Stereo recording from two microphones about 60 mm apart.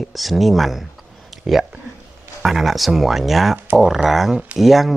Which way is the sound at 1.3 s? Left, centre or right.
Centre.